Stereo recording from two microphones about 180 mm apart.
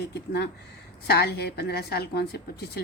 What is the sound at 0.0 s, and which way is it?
A woman's voice, 65° left (ahead or behind).